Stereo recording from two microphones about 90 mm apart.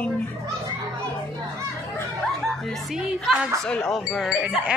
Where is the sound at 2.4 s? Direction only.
5° right (ahead or behind).